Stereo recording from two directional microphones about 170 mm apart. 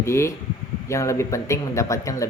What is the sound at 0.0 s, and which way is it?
A man's voice, 15° left (ahead or behind).